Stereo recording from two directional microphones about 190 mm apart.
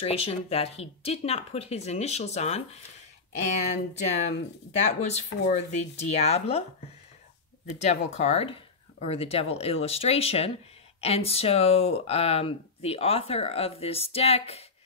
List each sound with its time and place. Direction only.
0.0 s speech: 30° left (ahead or behind)
3.7 s speech: 40° left (ahead or behind)
7.6 s speech: 35° left (ahead or behind)